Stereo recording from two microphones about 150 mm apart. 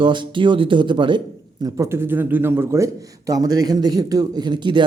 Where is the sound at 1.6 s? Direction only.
20° right (ahead or behind).